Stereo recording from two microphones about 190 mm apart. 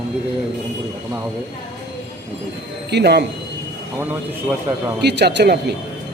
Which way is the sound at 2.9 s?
60° right (ahead or behind).